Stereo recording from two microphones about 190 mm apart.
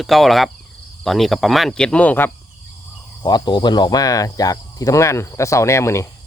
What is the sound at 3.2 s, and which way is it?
Speech, 20° left (ahead or behind).